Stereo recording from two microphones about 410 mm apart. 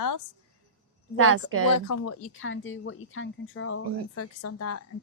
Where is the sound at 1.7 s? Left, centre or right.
Left.